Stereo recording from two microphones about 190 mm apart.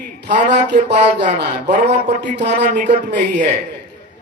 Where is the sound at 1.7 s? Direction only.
35° right (ahead or behind).